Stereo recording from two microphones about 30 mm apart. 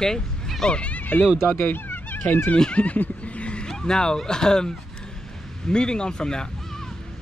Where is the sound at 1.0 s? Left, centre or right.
Left.